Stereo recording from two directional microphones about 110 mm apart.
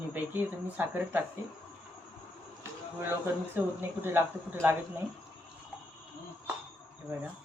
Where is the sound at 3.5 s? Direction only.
20° right (ahead or behind).